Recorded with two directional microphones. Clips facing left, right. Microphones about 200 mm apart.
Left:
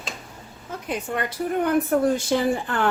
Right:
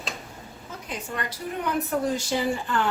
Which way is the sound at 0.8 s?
55° left (ahead or behind).